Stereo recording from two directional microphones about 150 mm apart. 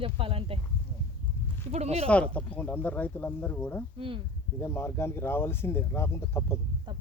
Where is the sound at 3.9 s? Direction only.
35° right (ahead or behind).